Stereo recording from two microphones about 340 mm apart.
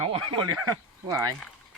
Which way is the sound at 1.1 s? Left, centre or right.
Centre.